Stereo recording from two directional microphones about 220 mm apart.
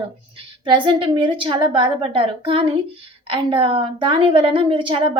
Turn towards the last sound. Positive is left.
turn(degrees=-20)  # may be behind; listen again after turning